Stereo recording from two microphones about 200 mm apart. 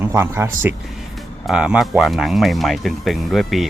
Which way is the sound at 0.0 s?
10° right (ahead or behind).